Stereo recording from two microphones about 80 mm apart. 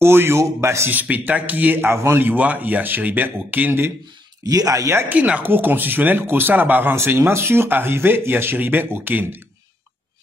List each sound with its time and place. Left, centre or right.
0.0 s speech: right
0.9 s speech: right
4.5 s speech: right
5.1 s speech: centre